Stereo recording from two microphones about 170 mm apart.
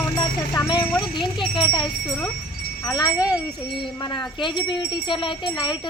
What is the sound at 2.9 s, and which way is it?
Speech, 25° left (ahead or behind).